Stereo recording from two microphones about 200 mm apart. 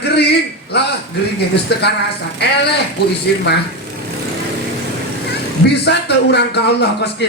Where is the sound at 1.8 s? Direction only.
55° left (ahead or behind).